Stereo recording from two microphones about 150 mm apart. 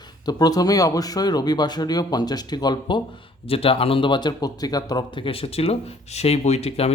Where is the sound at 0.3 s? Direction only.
25° left (ahead or behind).